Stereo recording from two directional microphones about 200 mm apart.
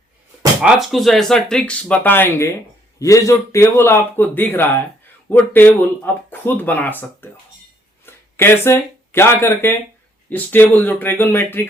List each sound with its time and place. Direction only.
0.6 s speech: centre (ahead or behind)